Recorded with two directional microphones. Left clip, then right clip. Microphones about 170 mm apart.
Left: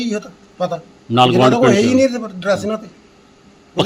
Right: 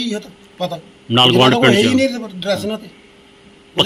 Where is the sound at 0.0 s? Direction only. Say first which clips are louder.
Left 1 dB; 20° left (ahead or behind).